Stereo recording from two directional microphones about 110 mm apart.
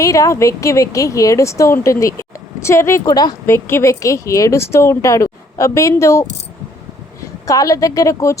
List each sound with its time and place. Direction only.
0.0 s speech: 30° left (ahead or behind)
3.1 s a woman's voice: 35° left (ahead or behind)
3.4 s speech: 25° left (ahead or behind)
7.4 s a woman's voice: 30° left (ahead or behind)